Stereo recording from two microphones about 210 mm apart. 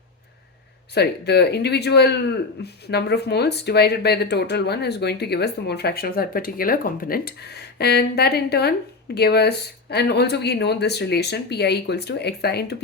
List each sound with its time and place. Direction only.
0.9 s speech: 50° left (ahead or behind)